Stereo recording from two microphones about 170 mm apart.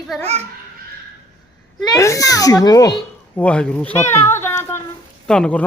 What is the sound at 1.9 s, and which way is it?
Speech, 20° left (ahead or behind).